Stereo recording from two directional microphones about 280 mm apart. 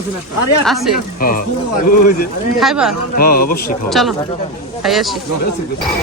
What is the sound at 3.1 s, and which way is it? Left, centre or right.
Speech, left.